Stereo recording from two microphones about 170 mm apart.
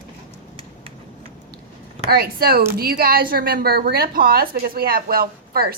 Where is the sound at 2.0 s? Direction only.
65° right (ahead or behind).